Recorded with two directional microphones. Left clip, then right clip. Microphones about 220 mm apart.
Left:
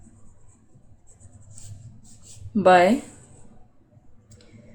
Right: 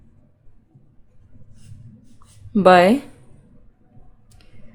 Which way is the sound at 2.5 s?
35° right (ahead or behind).